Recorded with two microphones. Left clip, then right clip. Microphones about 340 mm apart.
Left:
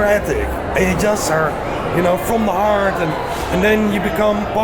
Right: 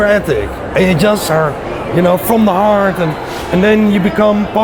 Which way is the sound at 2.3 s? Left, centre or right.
Right.